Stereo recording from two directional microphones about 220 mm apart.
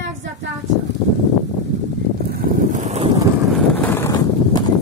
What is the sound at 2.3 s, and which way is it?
Vehicle, 35° right (ahead or behind).